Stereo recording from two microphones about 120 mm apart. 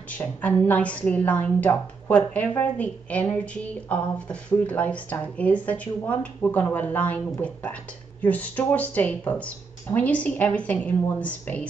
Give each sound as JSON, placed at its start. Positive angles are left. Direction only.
{"t": 0.1, "sound": "a woman's voice", "side_deg": 10}